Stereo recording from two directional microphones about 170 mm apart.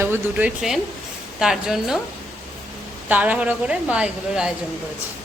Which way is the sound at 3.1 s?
10° right (ahead or behind).